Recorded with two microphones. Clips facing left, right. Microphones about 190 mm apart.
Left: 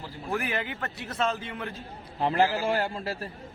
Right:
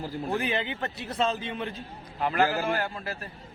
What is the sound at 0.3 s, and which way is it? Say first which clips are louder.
Speech: even; 20° right (ahead or behind).